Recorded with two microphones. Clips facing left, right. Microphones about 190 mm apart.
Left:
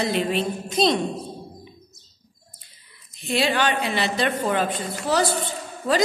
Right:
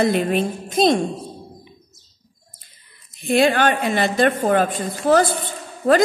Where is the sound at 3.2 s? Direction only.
50° right (ahead or behind).